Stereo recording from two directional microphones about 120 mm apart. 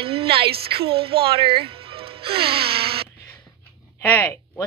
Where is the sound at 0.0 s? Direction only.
50° right (ahead or behind).